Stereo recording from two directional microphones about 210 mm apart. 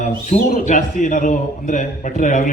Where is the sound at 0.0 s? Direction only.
35° left (ahead or behind).